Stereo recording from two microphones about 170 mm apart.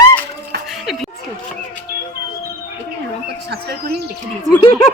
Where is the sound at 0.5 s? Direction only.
90° right.